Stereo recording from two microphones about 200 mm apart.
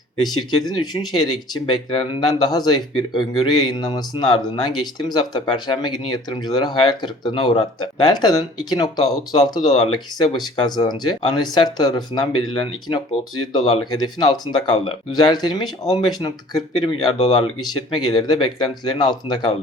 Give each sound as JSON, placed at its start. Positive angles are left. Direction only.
{"t": 0.6, "sound": "speech", "side_deg": 20}
{"t": 13.6, "sound": "speech", "side_deg": 25}